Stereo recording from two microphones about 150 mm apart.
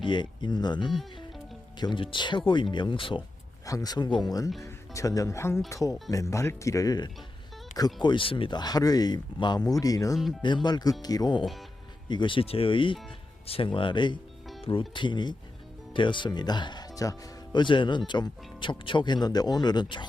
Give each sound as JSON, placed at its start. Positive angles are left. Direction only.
{"t": 0.0, "sound": "speech", "side_deg": 30}